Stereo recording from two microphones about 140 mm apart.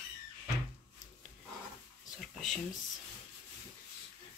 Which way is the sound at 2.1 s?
Centre (ahead or behind).